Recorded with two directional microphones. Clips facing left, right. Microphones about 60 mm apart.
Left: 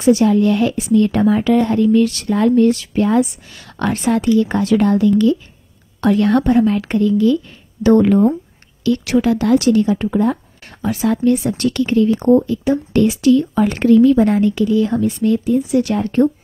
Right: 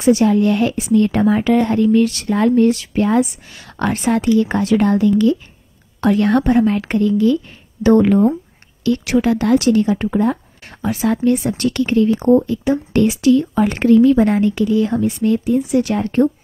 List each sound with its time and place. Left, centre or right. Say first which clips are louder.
0.0 s speech: left 1 dB; centre
6.1 s speech: left 1 dB; right
7.8 s speech: even; centre
8.8 s speech: even; right
12.1 s speech: even; centre
12.9 s speech: left 1 dB; centre